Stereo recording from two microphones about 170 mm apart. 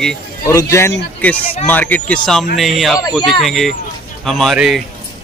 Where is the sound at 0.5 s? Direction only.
20° left (ahead or behind).